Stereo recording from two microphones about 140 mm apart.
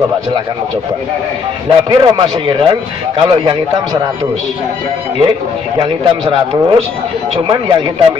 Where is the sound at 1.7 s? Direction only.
35° right (ahead or behind).